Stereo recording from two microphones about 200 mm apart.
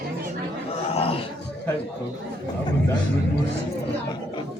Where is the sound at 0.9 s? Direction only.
30° left (ahead or behind).